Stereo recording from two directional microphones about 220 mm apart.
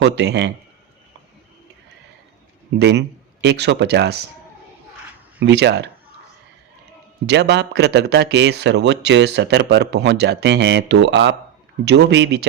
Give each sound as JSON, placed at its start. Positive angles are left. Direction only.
{"t": 0.0, "sound": "speech", "side_deg": -50}
{"t": 2.7, "sound": "speech", "side_deg": -50}
{"t": 5.5, "sound": "speech", "side_deg": -50}
{"t": 7.3, "sound": "speech", "side_deg": -50}